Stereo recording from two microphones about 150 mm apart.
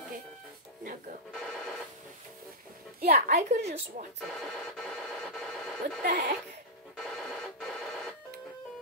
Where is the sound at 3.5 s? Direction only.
50° right (ahead or behind).